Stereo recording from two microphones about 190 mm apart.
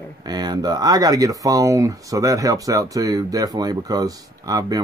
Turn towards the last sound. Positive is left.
turn(degrees=-20)  # may be behind; listen again after turning